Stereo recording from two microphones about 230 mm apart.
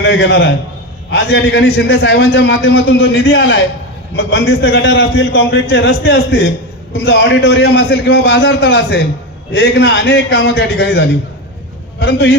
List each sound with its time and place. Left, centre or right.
0.0 s a man's voice: left